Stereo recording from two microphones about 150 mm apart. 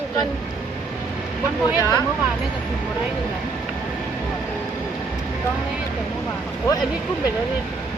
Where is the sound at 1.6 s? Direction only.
20° left (ahead or behind).